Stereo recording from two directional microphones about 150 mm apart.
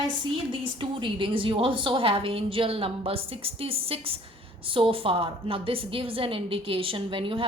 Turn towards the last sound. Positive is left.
turn(degrees=-35)  # may be behind; listen again after turning